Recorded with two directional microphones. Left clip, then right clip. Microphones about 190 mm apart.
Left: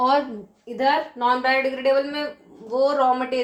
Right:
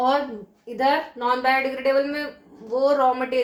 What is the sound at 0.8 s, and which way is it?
Speech, 35° left (ahead or behind).